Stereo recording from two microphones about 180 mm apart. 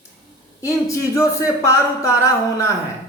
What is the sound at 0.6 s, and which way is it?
Speech, 15° left (ahead or behind).